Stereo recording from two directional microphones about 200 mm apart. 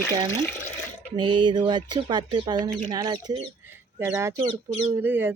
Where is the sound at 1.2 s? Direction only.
25° right (ahead or behind).